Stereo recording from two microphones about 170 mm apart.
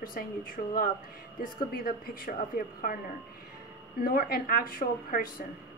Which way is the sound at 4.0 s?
60° left (ahead or behind).